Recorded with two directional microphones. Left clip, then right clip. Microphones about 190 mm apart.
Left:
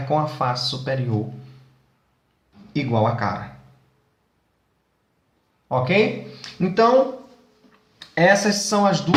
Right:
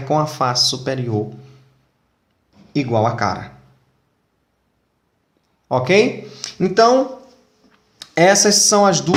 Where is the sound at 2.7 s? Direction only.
45° right (ahead or behind).